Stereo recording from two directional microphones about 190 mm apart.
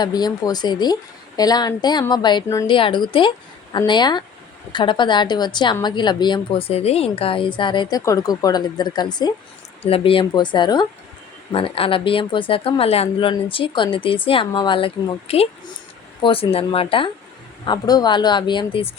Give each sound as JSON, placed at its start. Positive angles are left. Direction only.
{"t": 0.0, "sound": "a woman's voice", "side_deg": 20}